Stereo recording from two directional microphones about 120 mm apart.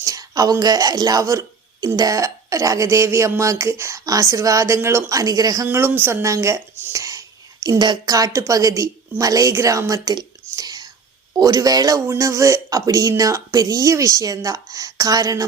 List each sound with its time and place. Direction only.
0.0 s a woman's voice: 30° right (ahead or behind)
5.6 s a woman's voice: 20° right (ahead or behind)